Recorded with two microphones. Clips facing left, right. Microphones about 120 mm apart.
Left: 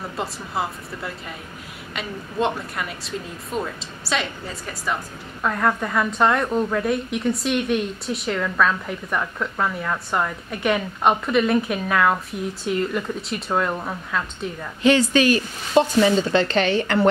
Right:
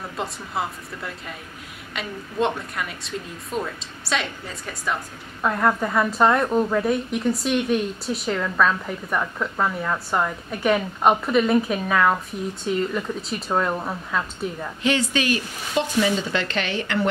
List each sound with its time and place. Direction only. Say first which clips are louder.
0.2 s a woman's voice: left 1 dB; centre (ahead or behind)
14.8 s speech: left 6 dB; 40° left (ahead or behind)